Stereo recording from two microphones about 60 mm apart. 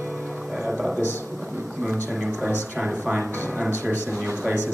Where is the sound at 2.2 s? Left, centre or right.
Centre.